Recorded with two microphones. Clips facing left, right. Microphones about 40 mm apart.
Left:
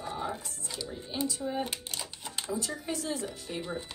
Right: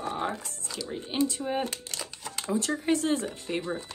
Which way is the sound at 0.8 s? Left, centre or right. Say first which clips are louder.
Right 6 dB; right.